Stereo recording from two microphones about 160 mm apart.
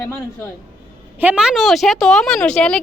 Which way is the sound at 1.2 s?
10° right (ahead or behind).